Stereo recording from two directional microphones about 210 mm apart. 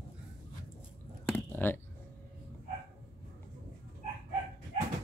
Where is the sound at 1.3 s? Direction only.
10° left (ahead or behind).